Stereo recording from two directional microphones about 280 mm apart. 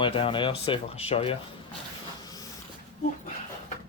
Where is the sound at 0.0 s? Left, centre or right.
Centre.